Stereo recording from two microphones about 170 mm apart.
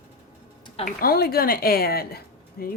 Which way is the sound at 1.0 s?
60° left (ahead or behind).